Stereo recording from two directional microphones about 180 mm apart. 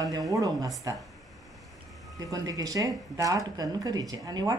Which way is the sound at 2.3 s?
20° right (ahead or behind).